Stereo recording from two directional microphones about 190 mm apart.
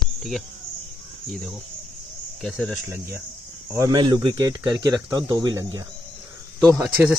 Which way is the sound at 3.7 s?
15° right (ahead or behind).